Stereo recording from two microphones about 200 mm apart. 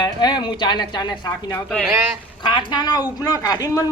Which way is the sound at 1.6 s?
5° left (ahead or behind).